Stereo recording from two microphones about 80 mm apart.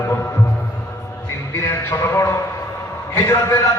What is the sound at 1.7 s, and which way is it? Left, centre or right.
A man's voice, left.